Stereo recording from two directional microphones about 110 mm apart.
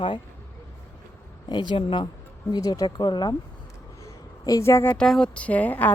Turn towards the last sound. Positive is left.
turn(degrees=15)  # may be behind; listen again after turning